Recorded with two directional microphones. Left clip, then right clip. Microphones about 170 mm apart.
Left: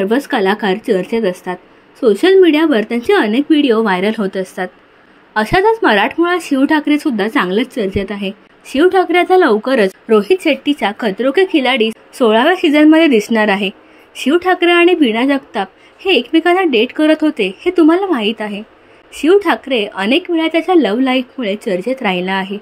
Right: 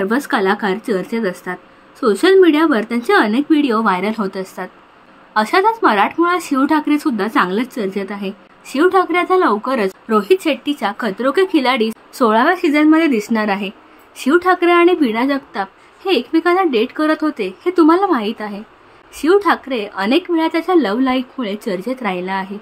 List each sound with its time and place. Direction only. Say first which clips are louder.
0.0 s speech: left 2 dB; 10° left (ahead or behind)